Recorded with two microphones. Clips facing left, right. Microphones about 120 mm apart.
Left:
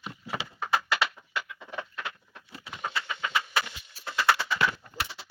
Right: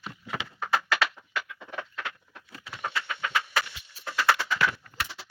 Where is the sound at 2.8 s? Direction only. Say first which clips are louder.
Right 1 dB; 5° left (ahead or behind).